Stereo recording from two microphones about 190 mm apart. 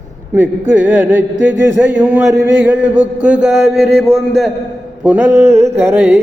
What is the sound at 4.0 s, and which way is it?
Speech, 5° right (ahead or behind).